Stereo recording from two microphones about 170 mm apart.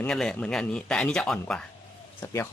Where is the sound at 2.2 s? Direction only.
15° left (ahead or behind).